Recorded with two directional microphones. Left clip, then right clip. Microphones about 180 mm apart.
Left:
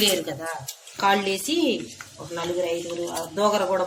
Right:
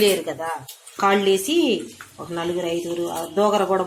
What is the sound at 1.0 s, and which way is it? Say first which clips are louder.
Speech: right 4 dB; 35° right (ahead or behind).